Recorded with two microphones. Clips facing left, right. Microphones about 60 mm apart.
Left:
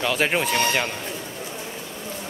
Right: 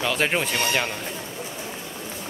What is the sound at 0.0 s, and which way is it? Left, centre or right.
Speech, centre.